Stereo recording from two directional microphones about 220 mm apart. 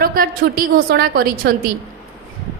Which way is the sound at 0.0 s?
40° right (ahead or behind).